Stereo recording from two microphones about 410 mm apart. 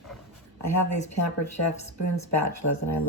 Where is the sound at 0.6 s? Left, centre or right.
Left.